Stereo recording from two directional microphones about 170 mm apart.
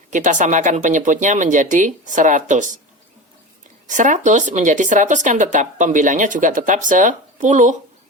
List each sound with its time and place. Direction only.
0.1 s speech: 50° right (ahead or behind)
3.8 s speech: 45° right (ahead or behind)